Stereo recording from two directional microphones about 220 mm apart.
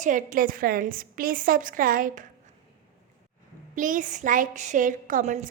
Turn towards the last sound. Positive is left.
turn(degrees=-35)  # may be behind; listen again after turning